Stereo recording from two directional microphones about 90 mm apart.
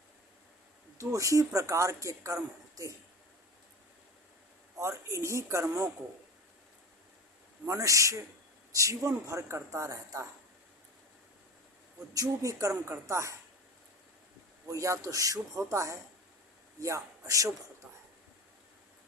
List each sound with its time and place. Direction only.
0.9 s speech: 35° right (ahead or behind)
4.8 s speech: 35° right (ahead or behind)
7.6 s speech: 35° right (ahead or behind)
12.1 s speech: 40° right (ahead or behind)
14.7 s speech: 35° right (ahead or behind)